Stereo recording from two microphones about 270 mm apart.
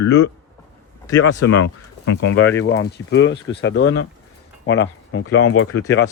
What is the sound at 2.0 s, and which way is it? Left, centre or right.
Speech, left.